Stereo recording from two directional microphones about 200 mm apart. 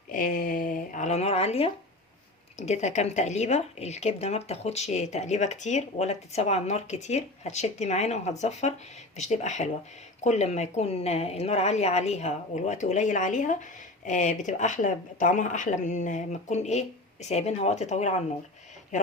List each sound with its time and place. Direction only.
0.1 s speech: 45° left (ahead or behind)